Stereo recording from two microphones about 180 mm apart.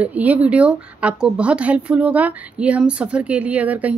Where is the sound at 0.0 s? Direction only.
10° right (ahead or behind).